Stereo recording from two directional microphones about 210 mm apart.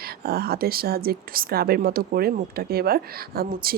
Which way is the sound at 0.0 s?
45° right (ahead or behind).